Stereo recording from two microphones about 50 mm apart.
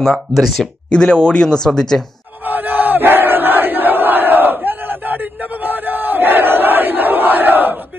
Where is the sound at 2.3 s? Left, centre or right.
Right.